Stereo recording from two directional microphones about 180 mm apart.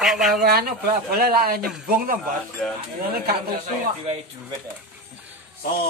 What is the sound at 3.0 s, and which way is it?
Speech, 55° right (ahead or behind).